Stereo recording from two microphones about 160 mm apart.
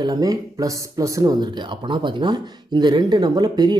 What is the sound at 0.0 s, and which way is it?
Speech, 20° right (ahead or behind).